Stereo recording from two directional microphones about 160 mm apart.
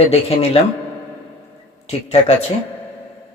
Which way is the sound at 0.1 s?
40° left (ahead or behind).